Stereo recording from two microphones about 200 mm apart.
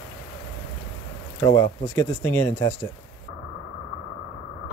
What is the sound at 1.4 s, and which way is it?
Speech, 15° left (ahead or behind).